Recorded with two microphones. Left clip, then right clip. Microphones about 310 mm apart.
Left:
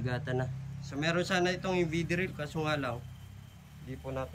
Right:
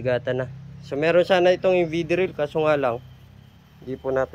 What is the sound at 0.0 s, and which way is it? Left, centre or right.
Speech, centre.